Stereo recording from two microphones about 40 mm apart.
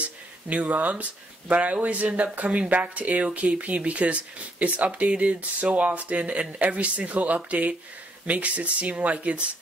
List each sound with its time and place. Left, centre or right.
0.5 s speech: right